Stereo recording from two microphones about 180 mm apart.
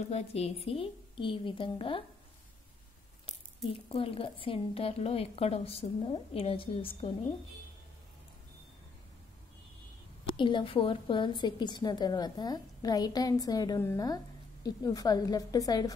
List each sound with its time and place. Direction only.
0.1 s a woman's voice: 35° left (ahead or behind)
3.9 s a woman's voice: 30° left (ahead or behind)
10.2 s a woman's voice: 25° left (ahead or behind)